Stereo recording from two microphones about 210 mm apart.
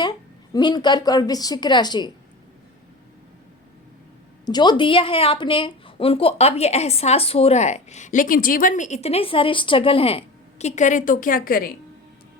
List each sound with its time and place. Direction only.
0.5 s a woman's voice: 20° left (ahead or behind)
4.4 s a woman's voice: 20° left (ahead or behind); by 11.7 s 45° left (ahead or behind)